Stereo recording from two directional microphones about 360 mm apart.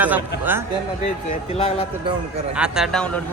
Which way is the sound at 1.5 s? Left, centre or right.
Centre.